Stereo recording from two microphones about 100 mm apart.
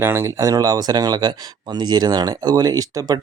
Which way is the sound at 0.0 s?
25° right (ahead or behind).